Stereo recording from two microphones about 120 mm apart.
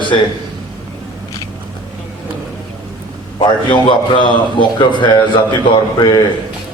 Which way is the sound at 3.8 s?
40° left (ahead or behind).